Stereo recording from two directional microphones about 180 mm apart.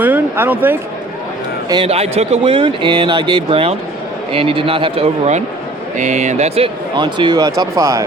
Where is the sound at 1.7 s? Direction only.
30° right (ahead or behind).